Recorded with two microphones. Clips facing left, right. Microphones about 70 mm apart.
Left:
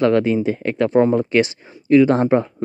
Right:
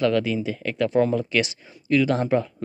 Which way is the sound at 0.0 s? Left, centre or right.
Left.